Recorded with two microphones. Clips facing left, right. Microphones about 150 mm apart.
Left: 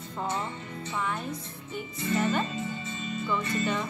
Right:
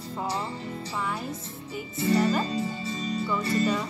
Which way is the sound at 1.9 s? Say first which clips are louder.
Right 5 dB; 35° right (ahead or behind).